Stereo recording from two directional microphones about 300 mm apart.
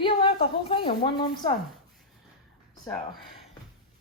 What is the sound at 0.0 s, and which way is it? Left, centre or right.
A woman's voice, centre.